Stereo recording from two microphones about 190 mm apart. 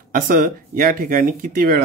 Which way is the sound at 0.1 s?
45° right (ahead or behind).